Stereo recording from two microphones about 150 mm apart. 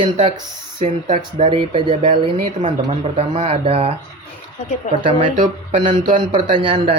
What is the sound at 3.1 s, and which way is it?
Speech, 45° right (ahead or behind).